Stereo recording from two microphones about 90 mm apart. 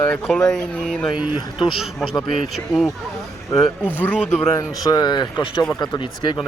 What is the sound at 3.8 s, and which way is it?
Speech, 15° left (ahead or behind).